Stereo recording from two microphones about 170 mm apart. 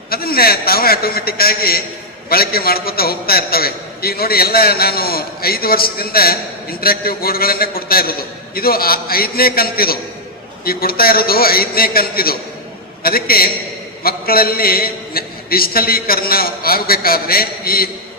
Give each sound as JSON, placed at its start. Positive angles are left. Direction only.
{"t": 0.1, "sound": "a man's voice", "side_deg": 60}